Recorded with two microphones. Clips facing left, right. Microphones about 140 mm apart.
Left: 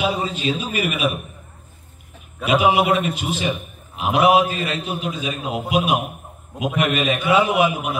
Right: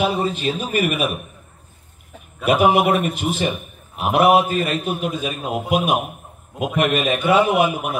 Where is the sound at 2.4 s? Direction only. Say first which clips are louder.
Right 2 dB; 50° right (ahead or behind).